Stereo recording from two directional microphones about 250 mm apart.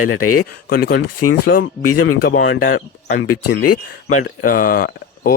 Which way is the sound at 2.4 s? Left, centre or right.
Left.